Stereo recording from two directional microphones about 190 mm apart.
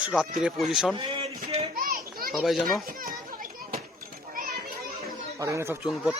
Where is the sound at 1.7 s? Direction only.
50° right (ahead or behind).